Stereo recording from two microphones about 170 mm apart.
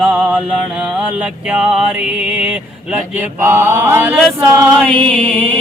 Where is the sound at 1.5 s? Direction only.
5° right (ahead or behind).